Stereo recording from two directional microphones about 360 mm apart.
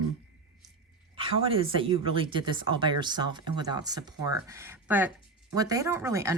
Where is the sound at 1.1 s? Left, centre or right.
Centre.